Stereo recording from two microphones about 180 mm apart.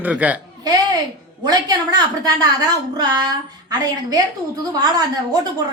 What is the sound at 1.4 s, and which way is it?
A woman's voice, 20° right (ahead or behind).